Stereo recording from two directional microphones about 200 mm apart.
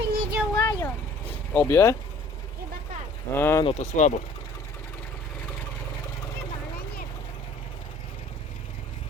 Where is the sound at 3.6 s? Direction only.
35° left (ahead or behind).